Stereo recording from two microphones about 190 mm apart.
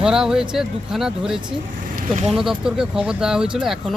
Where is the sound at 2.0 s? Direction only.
40° right (ahead or behind).